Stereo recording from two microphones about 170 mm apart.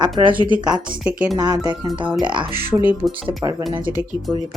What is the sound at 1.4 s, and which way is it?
Speech, 25° right (ahead or behind).